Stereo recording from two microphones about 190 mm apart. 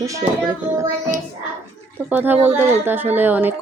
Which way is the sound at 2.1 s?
10° right (ahead or behind).